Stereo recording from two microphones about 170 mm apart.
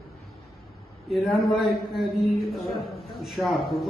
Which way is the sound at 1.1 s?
Centre (ahead or behind).